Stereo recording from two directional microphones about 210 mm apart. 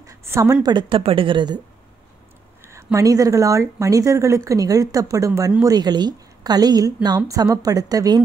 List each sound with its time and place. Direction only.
0.0 s a woman's voice: 15° right (ahead or behind)
2.6 s speech: 15° right (ahead or behind)